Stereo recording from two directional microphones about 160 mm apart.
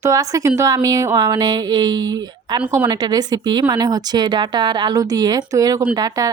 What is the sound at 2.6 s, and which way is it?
Speech, 10° right (ahead or behind).